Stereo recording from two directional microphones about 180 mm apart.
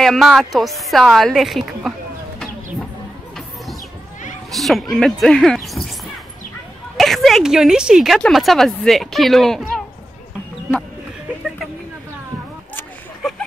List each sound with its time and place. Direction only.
0.0 s speech: centre (ahead or behind)
4.5 s speech: centre (ahead or behind)
7.0 s speech: centre (ahead or behind)